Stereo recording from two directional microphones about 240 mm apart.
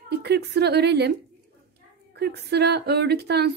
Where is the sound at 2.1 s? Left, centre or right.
Right.